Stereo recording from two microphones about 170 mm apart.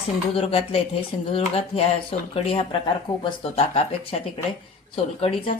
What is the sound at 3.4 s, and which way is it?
Speech, 35° left (ahead or behind).